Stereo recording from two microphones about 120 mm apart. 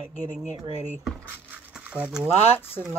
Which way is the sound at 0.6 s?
65° right (ahead or behind).